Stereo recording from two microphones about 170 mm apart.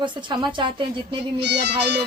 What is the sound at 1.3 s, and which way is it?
Music, 75° right (ahead or behind).